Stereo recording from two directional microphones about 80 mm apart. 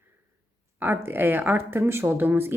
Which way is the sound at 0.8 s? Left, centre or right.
Right.